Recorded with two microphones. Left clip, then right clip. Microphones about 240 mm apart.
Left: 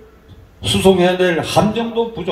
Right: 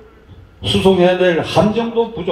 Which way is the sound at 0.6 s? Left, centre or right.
Left.